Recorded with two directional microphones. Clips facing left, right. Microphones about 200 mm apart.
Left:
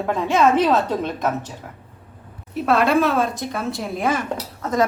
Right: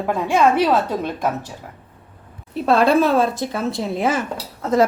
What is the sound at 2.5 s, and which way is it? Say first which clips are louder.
A woman's voice: right 2 dB; 30° right (ahead or behind).